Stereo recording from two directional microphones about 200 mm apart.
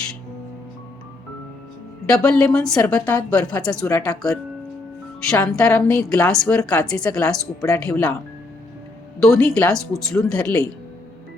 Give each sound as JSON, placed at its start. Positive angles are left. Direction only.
{"t": 2.0, "sound": "a woman's voice", "side_deg": 5}
{"t": 3.8, "sound": "speech", "side_deg": 15}
{"t": 5.3, "sound": "a woman's voice", "side_deg": 10}
{"t": 9.2, "sound": "a woman's voice", "side_deg": 5}